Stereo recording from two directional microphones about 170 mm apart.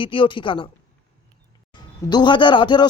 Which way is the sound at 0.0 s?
30° left (ahead or behind).